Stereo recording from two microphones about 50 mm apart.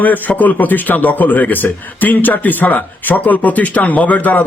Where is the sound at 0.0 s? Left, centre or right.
Left.